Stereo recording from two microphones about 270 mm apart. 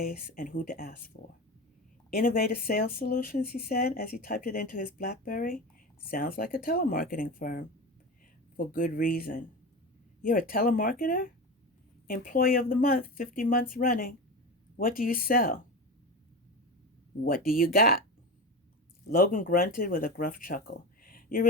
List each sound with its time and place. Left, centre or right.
0.0 s speech: left
17.2 s speech: left
19.0 s speech: left